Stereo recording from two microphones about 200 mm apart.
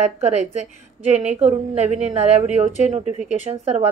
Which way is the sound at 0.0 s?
35° right (ahead or behind).